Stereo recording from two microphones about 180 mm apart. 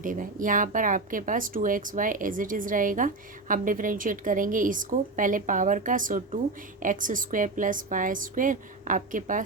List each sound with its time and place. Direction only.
0.0 s speech: 50° right (ahead or behind)